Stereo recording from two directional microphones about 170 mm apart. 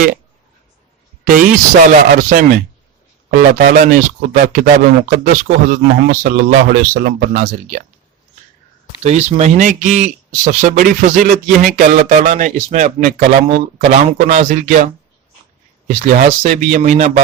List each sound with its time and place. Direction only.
1.8 s speech: 50° right (ahead or behind)
9.0 s speech: 40° right (ahead or behind)
15.9 s speech: 45° right (ahead or behind)